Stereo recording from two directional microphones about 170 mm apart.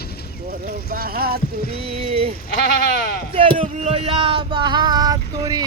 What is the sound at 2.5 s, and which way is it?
Speech, 65° left (ahead or behind).